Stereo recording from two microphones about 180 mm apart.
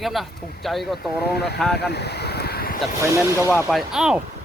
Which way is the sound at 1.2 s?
65° left (ahead or behind).